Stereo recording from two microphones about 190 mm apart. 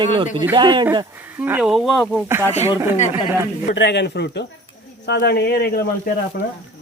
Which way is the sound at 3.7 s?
65° left (ahead or behind).